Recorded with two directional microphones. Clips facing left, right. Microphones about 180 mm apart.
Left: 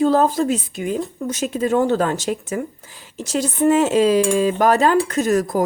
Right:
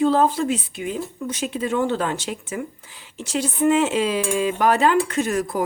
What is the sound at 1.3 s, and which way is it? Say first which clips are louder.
Speech: left 5 dB; 40° left (ahead or behind).